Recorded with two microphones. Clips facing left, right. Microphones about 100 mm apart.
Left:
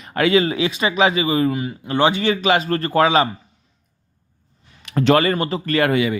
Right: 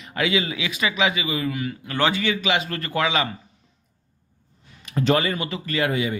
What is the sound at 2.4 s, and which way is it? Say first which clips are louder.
Speech: left 7 dB; 40° left (ahead or behind).